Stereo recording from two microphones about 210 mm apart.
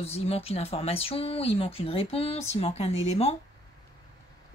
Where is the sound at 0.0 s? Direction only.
30° left (ahead or behind).